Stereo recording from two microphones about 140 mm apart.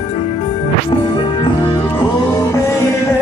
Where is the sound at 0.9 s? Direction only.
35° left (ahead or behind).